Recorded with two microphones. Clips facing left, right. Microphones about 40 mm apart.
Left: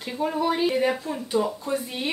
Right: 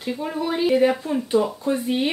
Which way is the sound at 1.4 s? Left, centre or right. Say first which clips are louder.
Right 3 dB; right.